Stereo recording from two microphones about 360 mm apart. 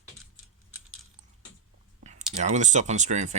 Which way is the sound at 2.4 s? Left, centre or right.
Centre.